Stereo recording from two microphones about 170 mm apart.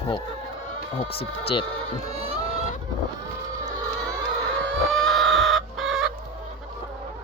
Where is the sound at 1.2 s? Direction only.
35° left (ahead or behind).